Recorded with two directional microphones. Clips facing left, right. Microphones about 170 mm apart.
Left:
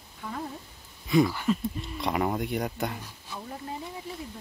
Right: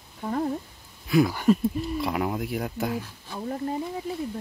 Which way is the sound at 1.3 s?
45° right (ahead or behind).